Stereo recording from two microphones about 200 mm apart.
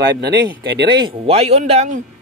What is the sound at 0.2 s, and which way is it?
Speech, 60° right (ahead or behind).